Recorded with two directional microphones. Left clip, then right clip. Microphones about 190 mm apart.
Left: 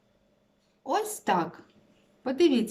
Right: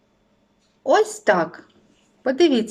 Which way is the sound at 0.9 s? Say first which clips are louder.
Right 10 dB; 20° left (ahead or behind).